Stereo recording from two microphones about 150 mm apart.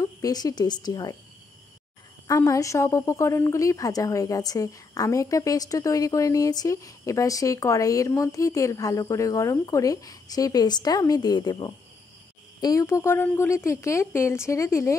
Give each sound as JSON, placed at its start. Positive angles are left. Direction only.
{"t": 0.0, "sound": "a woman's voice", "side_deg": 25}
{"t": 2.2, "sound": "a woman's voice", "side_deg": 20}